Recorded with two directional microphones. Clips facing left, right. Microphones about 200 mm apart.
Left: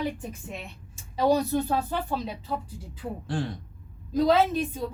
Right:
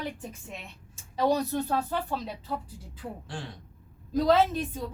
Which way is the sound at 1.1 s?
5° left (ahead or behind).